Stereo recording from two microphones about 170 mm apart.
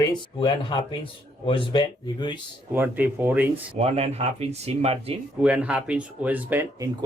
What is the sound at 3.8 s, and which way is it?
Speech, 40° right (ahead or behind).